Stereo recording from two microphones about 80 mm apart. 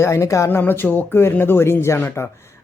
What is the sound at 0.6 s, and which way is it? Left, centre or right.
Speech, left.